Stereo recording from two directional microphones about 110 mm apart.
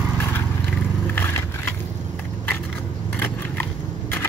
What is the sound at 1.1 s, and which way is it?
Vehicle, 20° left (ahead or behind).